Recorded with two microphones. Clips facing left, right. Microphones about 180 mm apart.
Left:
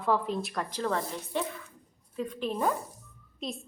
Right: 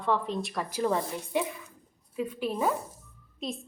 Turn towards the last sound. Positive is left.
turn(degrees=0)  # may be behind; listen again after turning